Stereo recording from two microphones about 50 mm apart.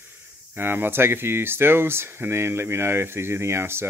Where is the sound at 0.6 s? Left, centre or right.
Right.